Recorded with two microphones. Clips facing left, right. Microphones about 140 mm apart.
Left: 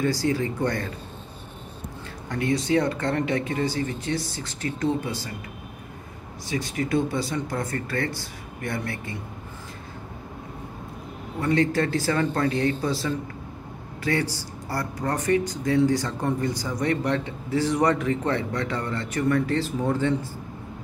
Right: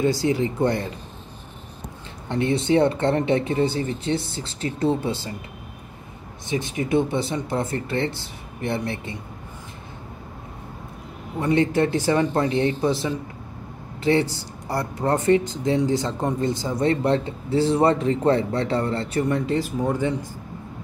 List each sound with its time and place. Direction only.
0.0 s speech: 20° right (ahead or behind)
2.2 s speech: 25° right (ahead or behind)
6.5 s speech: 20° right (ahead or behind)
11.3 s speech: 20° right (ahead or behind)